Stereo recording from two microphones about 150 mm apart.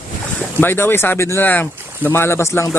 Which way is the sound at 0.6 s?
15° left (ahead or behind).